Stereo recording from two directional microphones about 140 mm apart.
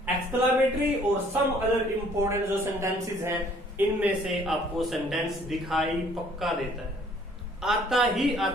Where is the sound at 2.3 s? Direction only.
20° right (ahead or behind).